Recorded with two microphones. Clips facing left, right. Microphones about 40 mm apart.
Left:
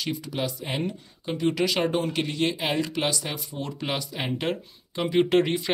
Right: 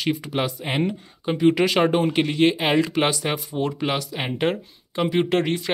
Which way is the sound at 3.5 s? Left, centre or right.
Centre.